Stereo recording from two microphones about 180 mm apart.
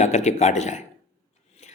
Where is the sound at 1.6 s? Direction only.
40° left (ahead or behind).